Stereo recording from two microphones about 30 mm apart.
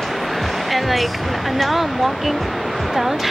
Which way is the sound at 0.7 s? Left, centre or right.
Centre.